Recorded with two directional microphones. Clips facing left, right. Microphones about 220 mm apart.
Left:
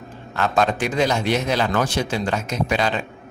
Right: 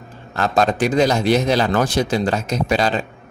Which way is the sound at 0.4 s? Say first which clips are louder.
Right 3 dB; 40° right (ahead or behind).